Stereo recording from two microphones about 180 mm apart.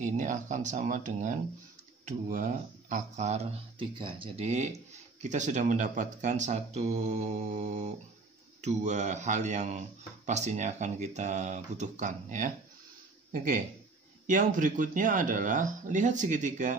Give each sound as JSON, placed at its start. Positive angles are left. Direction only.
{"t": 0.0, "sound": "speech", "side_deg": -45}